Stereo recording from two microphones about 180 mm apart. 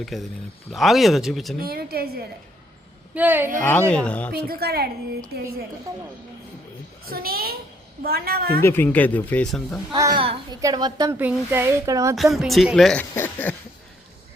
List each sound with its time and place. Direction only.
0.0 s speech: centre (ahead or behind)
1.5 s a woman's voice: 55° right (ahead or behind)
3.2 s speech: 10° right (ahead or behind)
3.6 s speech: 10° left (ahead or behind)
4.3 s a woman's voice: 55° right (ahead or behind)
5.9 s a child's voice: 20° right (ahead or behind)
7.0 s a woman's voice: 55° right (ahead or behind)
8.6 s speech: 10° left (ahead or behind)
9.9 s a child's voice: 25° right (ahead or behind)
11.2 s speech: 10° right (ahead or behind)
12.1 s speech: centre (ahead or behind)